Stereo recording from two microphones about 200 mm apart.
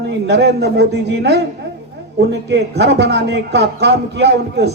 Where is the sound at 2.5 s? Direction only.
55° right (ahead or behind).